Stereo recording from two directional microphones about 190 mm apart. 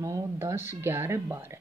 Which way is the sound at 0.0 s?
15° right (ahead or behind).